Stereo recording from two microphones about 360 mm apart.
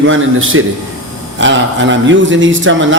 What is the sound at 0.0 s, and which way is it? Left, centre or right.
Speech, right.